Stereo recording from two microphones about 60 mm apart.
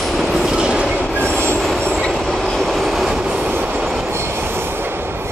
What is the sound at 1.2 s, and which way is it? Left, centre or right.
Train, right.